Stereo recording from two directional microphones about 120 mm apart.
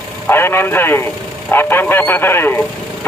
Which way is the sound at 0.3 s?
20° left (ahead or behind).